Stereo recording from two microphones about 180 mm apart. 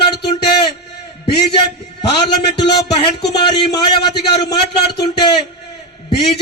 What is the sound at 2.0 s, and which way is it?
A man's voice, 25° left (ahead or behind).